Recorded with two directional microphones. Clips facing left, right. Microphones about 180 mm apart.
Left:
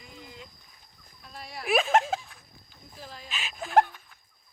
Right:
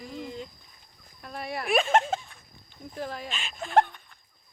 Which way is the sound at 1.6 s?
Centre (ahead or behind).